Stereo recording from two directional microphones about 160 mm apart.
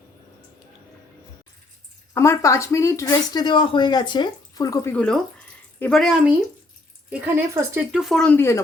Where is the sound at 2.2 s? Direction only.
20° left (ahead or behind); by 6.3 s centre (ahead or behind).